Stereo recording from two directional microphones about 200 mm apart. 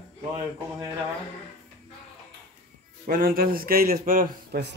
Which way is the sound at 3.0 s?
45° right (ahead or behind).